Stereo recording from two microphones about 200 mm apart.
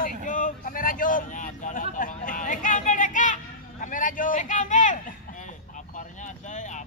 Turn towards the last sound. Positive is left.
turn(degrees=35)  # may be behind; listen again after turning